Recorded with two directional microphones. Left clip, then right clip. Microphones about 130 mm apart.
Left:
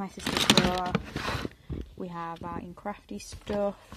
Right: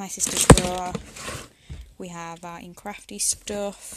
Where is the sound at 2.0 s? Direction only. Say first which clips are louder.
Right 2 dB; 30° right (ahead or behind).